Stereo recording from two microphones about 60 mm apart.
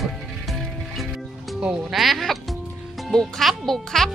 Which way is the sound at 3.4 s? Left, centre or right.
Centre.